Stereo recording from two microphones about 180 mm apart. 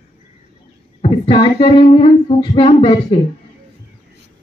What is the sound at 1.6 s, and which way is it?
A woman's voice, 30° left (ahead or behind).